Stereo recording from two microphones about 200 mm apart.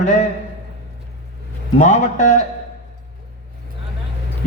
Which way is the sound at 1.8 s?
35° left (ahead or behind).